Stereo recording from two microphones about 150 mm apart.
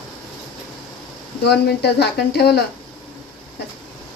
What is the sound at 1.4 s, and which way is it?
Speech, 90° left.